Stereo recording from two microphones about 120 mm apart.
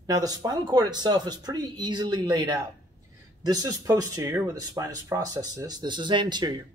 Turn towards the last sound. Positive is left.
turn(degrees=-35)  # may be behind; listen again after turning